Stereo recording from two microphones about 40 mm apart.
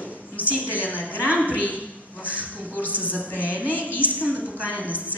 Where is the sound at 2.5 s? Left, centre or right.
Left.